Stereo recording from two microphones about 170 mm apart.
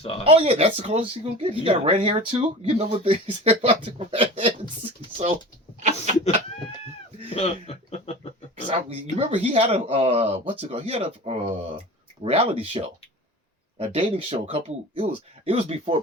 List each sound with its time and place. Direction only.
0.3 s speech: 35° right (ahead or behind)
7.3 s a sound: 35° left (ahead or behind)
8.6 s speech: 35° right (ahead or behind)